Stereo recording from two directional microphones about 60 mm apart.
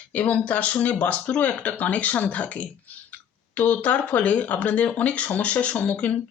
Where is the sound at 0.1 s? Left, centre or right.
Left.